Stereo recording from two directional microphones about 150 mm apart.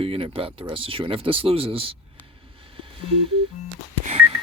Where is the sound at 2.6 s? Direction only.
40° right (ahead or behind).